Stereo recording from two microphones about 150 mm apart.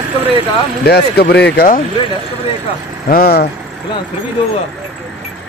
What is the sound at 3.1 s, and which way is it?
Speech, 85° left.